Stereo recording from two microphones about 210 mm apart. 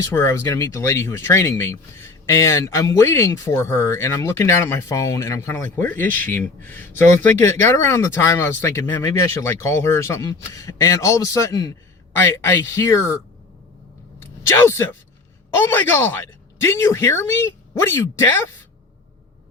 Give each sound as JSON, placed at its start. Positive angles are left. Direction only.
{"t": 0.0, "sound": "speech", "side_deg": 15}
{"t": 14.2, "sound": "a sound", "side_deg": 10}
{"t": 15.5, "sound": "speech", "side_deg": 10}